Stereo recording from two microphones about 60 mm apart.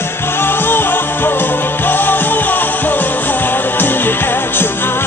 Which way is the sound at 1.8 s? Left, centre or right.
Left.